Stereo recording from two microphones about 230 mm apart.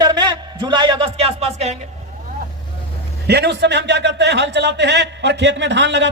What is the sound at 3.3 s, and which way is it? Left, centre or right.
Speech, right.